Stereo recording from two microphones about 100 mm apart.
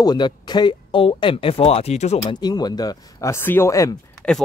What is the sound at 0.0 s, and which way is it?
Speech, 45° left (ahead or behind).